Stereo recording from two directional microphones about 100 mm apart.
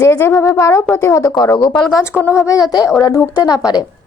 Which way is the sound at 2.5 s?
40° left (ahead or behind).